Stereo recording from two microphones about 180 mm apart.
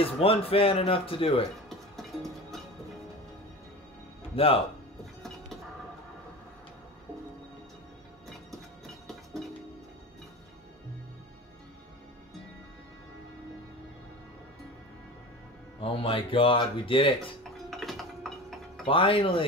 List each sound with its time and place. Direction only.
0.0 s speech: 30° left (ahead or behind)
1.7 s music: centre (ahead or behind)
4.4 s speech: 30° left (ahead or behind)
8.3 s train: centre (ahead or behind)
15.8 s speech: 30° left (ahead or behind)
17.4 s tick-tock: centre (ahead or behind)
18.9 s speech: 30° left (ahead or behind)